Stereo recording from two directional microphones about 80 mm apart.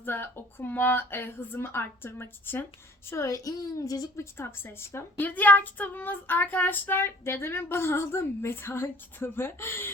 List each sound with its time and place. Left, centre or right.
0.0 s child singing: left
3.1 s a woman's voice: left
4.2 s speech: left
5.2 s child singing: left